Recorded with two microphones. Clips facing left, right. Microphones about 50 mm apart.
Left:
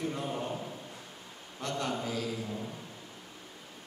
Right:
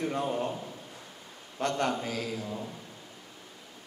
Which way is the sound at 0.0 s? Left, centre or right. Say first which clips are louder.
Right 4 dB; right.